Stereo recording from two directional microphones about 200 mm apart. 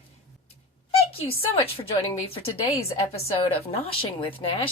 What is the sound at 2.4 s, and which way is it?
Speech, 30° left (ahead or behind).